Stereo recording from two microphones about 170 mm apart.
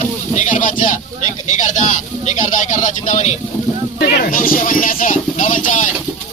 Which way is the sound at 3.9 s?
55° left (ahead or behind).